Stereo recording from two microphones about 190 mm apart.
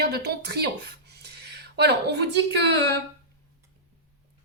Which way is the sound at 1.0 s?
60° right (ahead or behind).